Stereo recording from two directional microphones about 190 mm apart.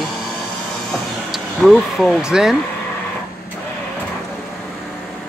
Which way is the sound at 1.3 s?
Centre (ahead or behind).